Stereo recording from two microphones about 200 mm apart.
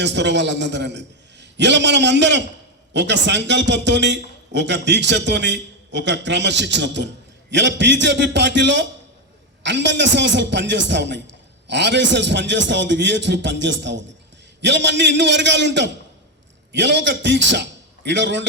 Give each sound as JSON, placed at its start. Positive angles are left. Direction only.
{"t": 0.0, "sound": "a man's voice", "side_deg": -60}